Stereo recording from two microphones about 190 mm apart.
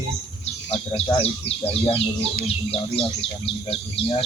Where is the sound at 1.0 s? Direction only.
30° left (ahead or behind).